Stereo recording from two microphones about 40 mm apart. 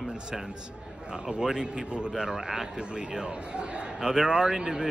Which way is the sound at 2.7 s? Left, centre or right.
Right.